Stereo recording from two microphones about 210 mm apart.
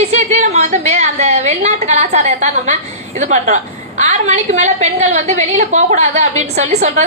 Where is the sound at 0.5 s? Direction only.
30° right (ahead or behind).